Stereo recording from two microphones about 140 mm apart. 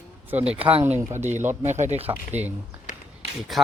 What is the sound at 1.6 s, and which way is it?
Speech, 55° right (ahead or behind).